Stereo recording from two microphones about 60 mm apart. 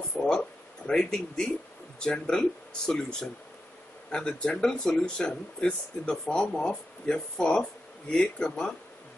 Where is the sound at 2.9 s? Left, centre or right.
Centre.